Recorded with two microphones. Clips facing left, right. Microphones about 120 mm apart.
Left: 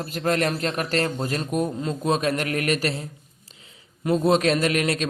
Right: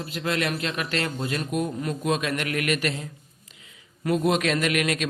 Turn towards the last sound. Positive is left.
turn(degrees=35)  # may be behind; listen again after turning